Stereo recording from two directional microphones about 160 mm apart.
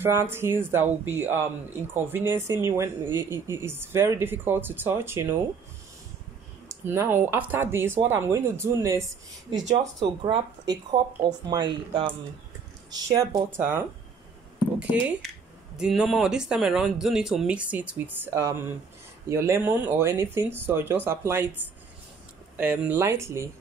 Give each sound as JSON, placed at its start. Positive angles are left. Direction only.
{"t": 0.0, "sound": "speech", "side_deg": -15}
{"t": 6.8, "sound": "speech", "side_deg": -15}
{"t": 10.0, "sound": "speech", "side_deg": -30}
{"t": 12.9, "sound": "speech", "side_deg": -20}
{"t": 22.6, "sound": "speech", "side_deg": -10}